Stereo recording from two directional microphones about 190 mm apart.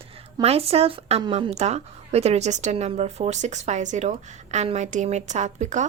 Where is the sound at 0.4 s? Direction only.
30° right (ahead or behind).